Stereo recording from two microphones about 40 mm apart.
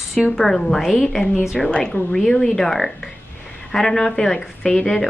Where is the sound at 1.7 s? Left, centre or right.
Left.